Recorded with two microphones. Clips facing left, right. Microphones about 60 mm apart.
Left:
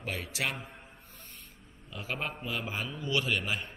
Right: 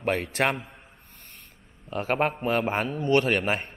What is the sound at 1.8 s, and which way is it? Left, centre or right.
A man's voice, right.